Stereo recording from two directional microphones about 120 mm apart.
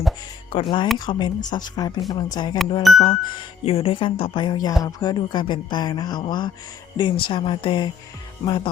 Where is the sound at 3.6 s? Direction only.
55° left (ahead or behind).